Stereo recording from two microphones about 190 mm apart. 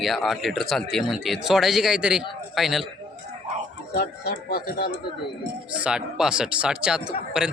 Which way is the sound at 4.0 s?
55° left (ahead or behind).